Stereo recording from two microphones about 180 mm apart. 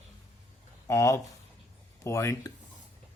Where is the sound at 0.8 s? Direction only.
15° left (ahead or behind).